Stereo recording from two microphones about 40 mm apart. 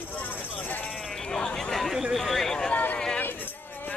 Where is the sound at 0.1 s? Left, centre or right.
Left.